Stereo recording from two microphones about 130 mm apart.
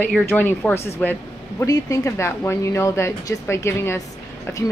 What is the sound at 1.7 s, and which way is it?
A woman's voice, 25° left (ahead or behind).